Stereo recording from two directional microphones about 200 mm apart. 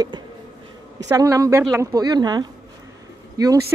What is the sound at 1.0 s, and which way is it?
Speech, 15° right (ahead or behind).